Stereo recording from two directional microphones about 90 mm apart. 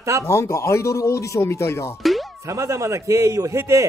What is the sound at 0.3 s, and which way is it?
Speech, 30° left (ahead or behind).